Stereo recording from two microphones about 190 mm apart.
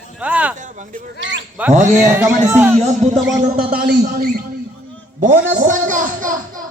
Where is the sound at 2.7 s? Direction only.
35° right (ahead or behind).